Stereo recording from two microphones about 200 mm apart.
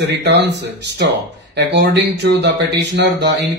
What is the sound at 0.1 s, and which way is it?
Speech, 60° right (ahead or behind).